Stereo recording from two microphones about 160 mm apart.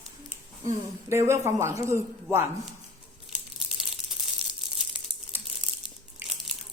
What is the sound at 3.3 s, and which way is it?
Crumpling, centre (ahead or behind).